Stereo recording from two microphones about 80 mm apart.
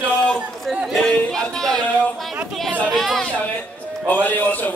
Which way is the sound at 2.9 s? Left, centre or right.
Centre.